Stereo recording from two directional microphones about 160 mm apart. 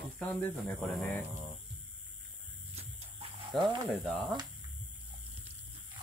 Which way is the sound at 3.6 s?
30° right (ahead or behind).